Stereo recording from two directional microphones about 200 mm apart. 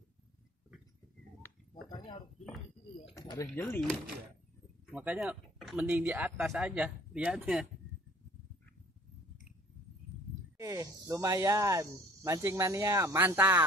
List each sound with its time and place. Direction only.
1.4 s a sound: 25° left (ahead or behind)
3.2 s speech: 20° left (ahead or behind)
3.5 s speech: 5° left (ahead or behind)
4.9 s speech: 10° right (ahead or behind)
10.6 s snake: 15° right (ahead or behind)
11.1 s speech: 15° right (ahead or behind)